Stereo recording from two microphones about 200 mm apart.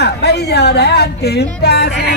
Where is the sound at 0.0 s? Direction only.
55° left (ahead or behind).